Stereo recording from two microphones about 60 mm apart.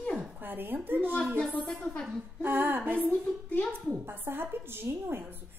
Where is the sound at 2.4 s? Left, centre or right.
Right.